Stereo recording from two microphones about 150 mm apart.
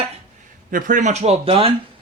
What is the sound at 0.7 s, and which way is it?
A man's voice, 65° right (ahead or behind).